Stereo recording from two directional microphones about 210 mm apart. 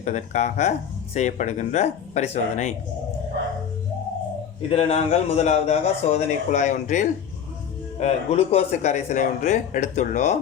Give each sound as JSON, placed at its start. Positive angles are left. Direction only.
{"t": 0.0, "sound": "a man's voice", "side_deg": 35}
{"t": 4.7, "sound": "a man's voice", "side_deg": 30}